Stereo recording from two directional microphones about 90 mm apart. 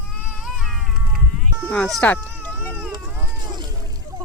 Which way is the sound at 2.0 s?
20° left (ahead or behind).